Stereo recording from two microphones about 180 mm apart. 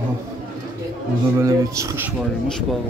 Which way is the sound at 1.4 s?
15° right (ahead or behind).